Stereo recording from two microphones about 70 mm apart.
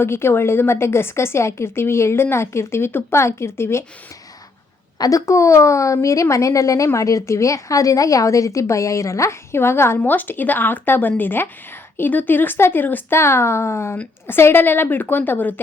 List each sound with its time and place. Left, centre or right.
0.0 s a woman's voice: left
4.9 s a woman's voice: left
10.0 s a woman's voice: left